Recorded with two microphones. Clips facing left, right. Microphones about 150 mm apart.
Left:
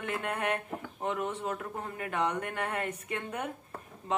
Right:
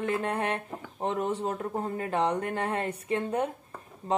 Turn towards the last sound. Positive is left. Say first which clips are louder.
# right 4 dB
turn(degrees=-35)  # may be behind; listen again after turning